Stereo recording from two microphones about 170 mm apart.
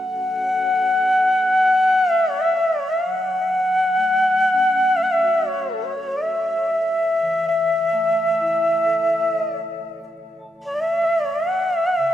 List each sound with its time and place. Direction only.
0.4 s music: centre (ahead or behind)
10.8 s music: centre (ahead or behind)